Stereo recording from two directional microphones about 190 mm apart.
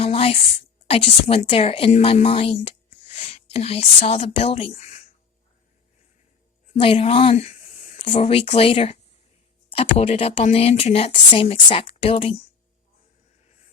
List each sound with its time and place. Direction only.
0.0 s a woman's voice: 30° left (ahead or behind)
6.7 s speech: 30° left (ahead or behind)